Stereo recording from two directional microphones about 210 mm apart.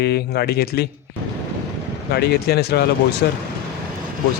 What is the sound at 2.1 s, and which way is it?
Speech, 50° left (ahead or behind).